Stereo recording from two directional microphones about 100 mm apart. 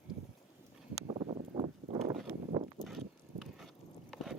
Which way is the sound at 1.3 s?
80° right.